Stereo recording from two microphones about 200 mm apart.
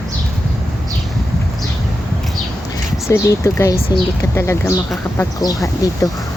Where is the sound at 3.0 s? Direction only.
15° left (ahead or behind).